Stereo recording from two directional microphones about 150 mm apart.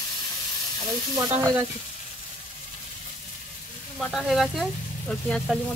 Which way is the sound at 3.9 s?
Centre (ahead or behind).